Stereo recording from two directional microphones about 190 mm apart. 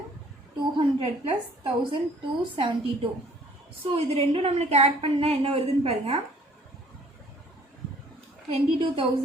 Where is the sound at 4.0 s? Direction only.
30° right (ahead or behind).